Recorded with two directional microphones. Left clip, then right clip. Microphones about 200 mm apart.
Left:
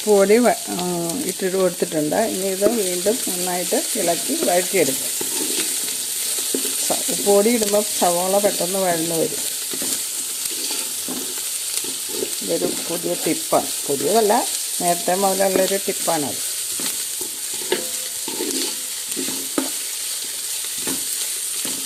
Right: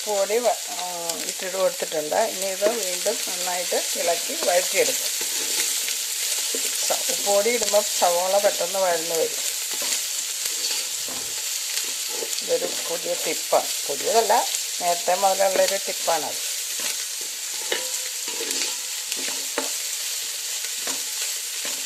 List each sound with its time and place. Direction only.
0.1 s frying: 20° left (ahead or behind)
1.4 s frying: 5° left (ahead or behind)
6.8 s frying: 5° left (ahead or behind)
12.5 s frying: centre (ahead or behind)